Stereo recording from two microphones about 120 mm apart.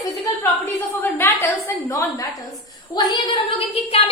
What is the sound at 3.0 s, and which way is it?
Speech, 45° left (ahead or behind).